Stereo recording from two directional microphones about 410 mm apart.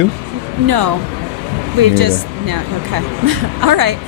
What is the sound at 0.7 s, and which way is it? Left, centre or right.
Speech, right.